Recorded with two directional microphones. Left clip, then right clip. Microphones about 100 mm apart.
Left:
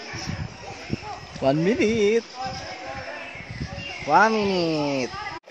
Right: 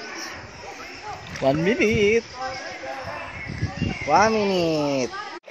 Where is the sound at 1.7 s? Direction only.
10° left (ahead or behind).